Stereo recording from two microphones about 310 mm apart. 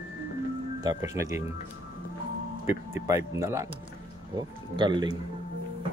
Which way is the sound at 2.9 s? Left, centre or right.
Centre.